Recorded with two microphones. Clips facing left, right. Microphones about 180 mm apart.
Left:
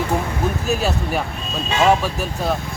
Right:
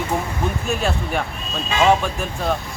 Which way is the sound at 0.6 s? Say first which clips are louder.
Left 2 dB; 5° left (ahead or behind).